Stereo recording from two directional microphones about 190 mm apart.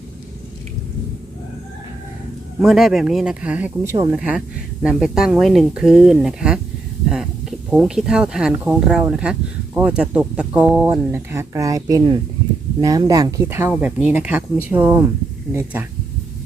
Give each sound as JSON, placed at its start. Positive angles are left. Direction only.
{"t": 2.6, "sound": "speech", "side_deg": 0}
{"t": 7.7, "sound": "speech", "side_deg": -5}